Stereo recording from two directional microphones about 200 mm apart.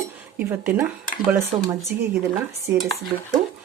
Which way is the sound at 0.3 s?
10° right (ahead or behind).